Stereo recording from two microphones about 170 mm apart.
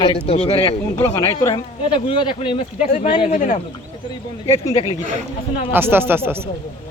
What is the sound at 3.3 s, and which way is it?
Speech, 45° left (ahead or behind).